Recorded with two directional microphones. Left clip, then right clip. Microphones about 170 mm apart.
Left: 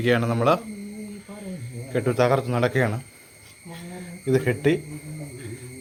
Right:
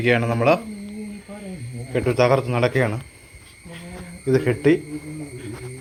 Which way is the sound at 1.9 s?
5° left (ahead or behind).